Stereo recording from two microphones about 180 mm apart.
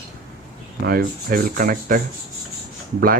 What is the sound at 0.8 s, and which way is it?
Speech, 55° right (ahead or behind).